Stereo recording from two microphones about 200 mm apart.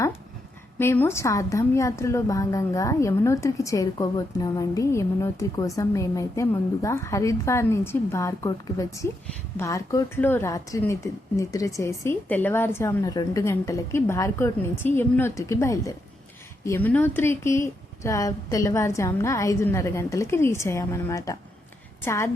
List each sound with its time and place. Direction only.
0.8 s a woman's voice: 10° left (ahead or behind)